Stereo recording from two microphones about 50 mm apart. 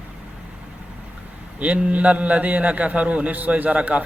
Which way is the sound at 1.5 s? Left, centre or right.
Right.